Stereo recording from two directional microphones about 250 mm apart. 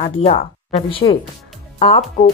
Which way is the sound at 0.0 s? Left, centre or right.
Left.